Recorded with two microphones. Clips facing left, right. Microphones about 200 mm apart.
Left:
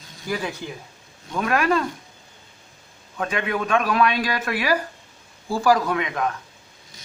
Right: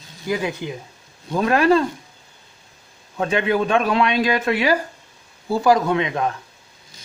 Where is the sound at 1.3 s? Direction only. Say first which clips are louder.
Right 5 dB; 30° right (ahead or behind).